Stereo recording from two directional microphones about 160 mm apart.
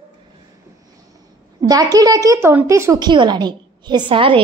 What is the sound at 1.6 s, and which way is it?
A woman's voice, 25° right (ahead or behind).